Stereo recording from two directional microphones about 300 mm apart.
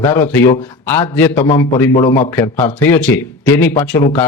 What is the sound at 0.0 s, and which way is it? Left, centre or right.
Speech, centre.